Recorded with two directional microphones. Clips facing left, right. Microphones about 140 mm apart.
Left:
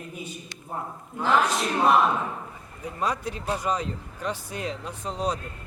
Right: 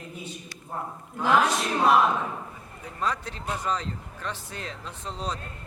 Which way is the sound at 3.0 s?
10° left (ahead or behind).